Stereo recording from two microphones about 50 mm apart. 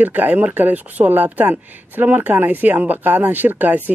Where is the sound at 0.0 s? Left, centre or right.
Right.